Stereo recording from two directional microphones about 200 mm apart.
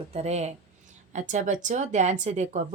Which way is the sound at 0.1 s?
30° right (ahead or behind).